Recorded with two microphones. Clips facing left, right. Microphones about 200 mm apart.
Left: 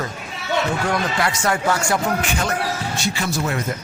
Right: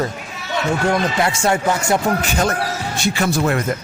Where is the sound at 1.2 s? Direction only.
25° right (ahead or behind).